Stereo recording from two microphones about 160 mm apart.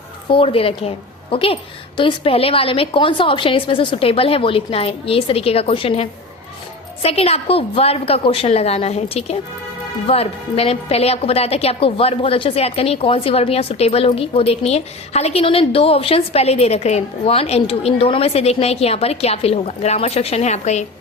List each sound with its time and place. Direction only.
0.3 s a woman's voice: 35° left (ahead or behind)